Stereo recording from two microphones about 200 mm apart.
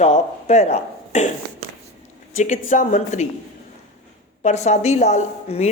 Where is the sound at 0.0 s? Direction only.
35° left (ahead or behind).